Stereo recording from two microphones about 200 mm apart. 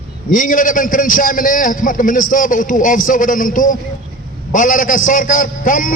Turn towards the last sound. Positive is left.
turn(degrees=45)  # may be behind; listen again after turning